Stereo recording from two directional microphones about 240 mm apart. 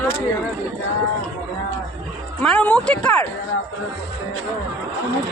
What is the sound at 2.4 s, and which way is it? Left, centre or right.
Speech, centre.